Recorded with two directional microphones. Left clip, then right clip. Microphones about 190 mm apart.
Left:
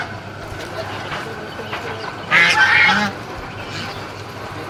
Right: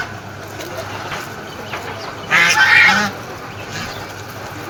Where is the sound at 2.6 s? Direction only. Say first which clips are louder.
Right 3 dB; 35° right (ahead or behind).